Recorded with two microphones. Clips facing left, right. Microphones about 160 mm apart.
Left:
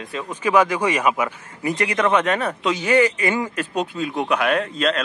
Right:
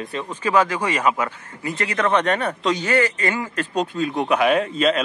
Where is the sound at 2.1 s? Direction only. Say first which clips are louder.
Even; centre (ahead or behind).